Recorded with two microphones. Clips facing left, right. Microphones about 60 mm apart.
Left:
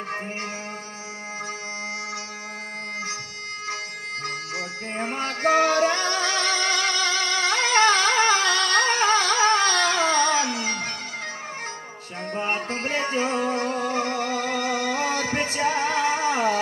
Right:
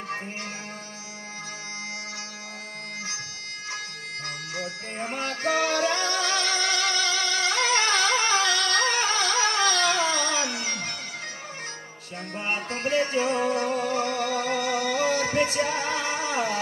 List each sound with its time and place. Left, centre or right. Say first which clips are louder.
4.2 s music: left 2 dB; left
12.4 s music: left 3 dB; left